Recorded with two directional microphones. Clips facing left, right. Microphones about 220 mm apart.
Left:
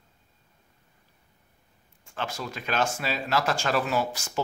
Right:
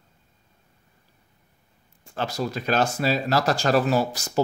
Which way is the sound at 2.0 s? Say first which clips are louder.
Right 6 dB; 35° right (ahead or behind).